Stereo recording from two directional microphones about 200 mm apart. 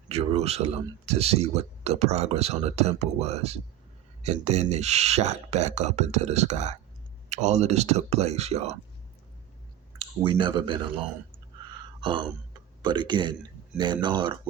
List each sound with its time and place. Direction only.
0.1 s speech: 30° right (ahead or behind)
10.0 s speech: 25° right (ahead or behind)
11.9 s a sound: 25° right (ahead or behind)
12.8 s speech: 25° right (ahead or behind)